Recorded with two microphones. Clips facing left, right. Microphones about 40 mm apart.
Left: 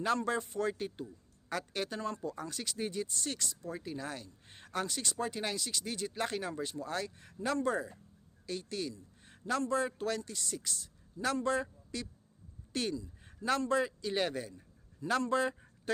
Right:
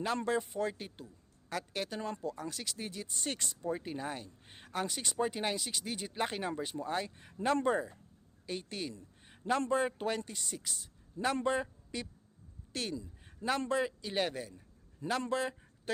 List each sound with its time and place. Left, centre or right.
0.3 s a woman's voice: centre
2.0 s speech: centre
2.2 s speech: centre
3.2 s speech: right
4.5 s a man's voice: centre
12.7 s speech: centre
13.2 s a sound: centre
13.7 s speech: centre